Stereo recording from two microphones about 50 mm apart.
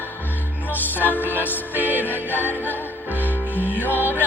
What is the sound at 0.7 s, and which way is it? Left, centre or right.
Music, left.